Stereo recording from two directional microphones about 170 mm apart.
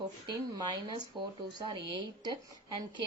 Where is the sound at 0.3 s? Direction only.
20° right (ahead or behind).